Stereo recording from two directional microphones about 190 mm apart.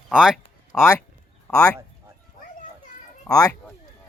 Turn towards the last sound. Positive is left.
turn(degrees=5)  # may be behind; listen again after turning